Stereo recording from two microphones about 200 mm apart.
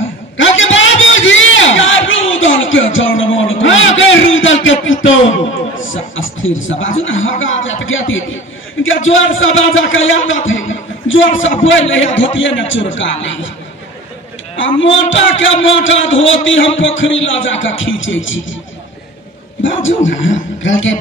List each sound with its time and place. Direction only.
0.4 s a sound: 70° left (ahead or behind)
5.8 s a man's voice: 75° left (ahead or behind)
14.8 s a man's voice: 70° left (ahead or behind)
19.6 s a man's voice: 70° left (ahead or behind)